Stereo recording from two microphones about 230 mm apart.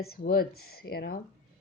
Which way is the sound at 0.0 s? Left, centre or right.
Left.